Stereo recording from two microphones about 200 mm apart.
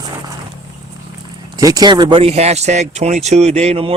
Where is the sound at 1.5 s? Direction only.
20° right (ahead or behind).